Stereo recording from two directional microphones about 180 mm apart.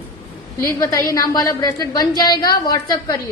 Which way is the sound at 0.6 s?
15° left (ahead or behind).